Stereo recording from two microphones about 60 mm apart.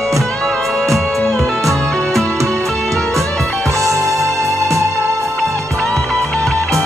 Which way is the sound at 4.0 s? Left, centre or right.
Right.